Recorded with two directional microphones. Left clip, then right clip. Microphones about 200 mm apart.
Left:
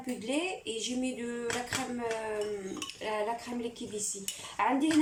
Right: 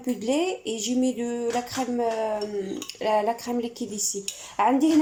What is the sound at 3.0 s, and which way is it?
A woman's voice, 40° right (ahead or behind).